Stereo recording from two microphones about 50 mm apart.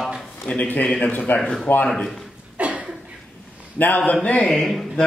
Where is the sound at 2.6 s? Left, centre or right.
Right.